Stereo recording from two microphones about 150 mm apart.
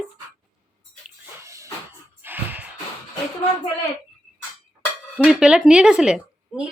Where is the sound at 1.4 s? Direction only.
20° right (ahead or behind).